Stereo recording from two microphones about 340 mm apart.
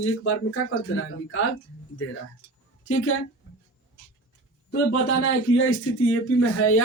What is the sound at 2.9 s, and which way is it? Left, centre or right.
Speech, left.